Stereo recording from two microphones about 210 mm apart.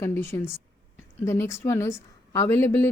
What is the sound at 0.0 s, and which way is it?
A woman's voice, 10° left (ahead or behind).